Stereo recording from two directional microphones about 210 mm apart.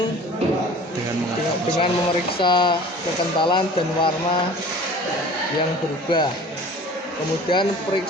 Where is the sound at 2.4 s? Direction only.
20° left (ahead or behind).